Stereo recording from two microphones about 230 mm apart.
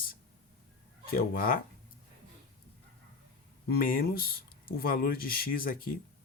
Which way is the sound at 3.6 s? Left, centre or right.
Left.